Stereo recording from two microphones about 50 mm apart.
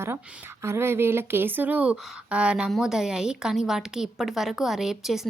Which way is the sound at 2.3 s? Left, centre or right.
Right.